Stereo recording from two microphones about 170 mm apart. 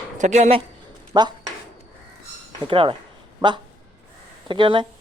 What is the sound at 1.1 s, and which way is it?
Speech, 25° right (ahead or behind).